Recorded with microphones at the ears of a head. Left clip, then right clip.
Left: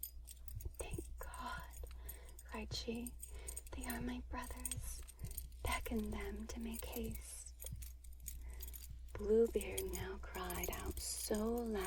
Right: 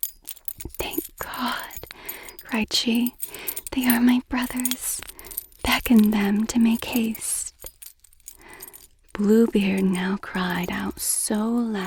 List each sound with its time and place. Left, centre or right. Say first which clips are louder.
0.0 s whispering: right 19 dB; right
9.1 s speech: right 14 dB; right